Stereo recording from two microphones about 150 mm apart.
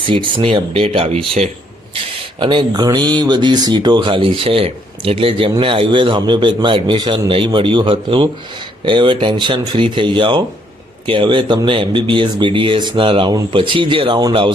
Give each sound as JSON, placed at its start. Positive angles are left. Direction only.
{"t": 0.1, "sound": "speech", "side_deg": -35}